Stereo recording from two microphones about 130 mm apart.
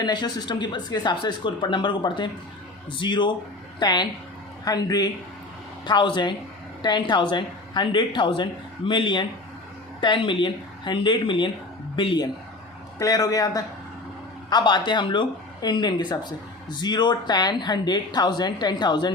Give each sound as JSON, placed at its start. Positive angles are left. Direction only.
{"t": 0.0, "sound": "speech", "side_deg": 35}